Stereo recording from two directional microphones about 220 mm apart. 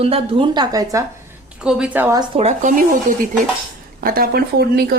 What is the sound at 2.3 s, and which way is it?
Speech, 30° right (ahead or behind).